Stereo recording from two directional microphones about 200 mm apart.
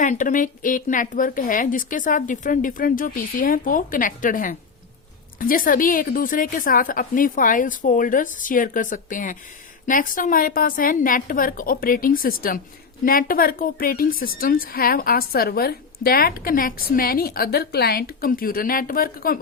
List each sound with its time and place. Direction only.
0.0 s a woman's voice: 40° left (ahead or behind)